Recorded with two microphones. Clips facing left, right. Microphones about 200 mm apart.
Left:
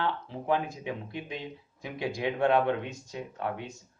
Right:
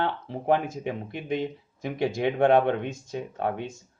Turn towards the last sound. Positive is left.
turn(degrees=-55)  # may be behind; listen again after turning